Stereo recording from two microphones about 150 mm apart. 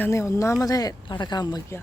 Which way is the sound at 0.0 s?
20° left (ahead or behind).